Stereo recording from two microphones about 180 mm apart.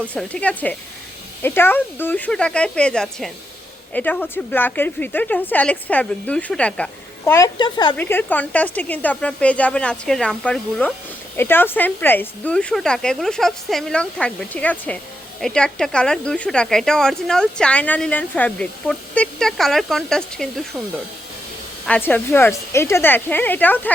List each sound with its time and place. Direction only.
0.1 s speech: 5° left (ahead or behind)
7.3 s a child's voice: 20° left (ahead or behind)
7.9 s speech: 10° left (ahead or behind)
21.8 s speech: 10° left (ahead or behind)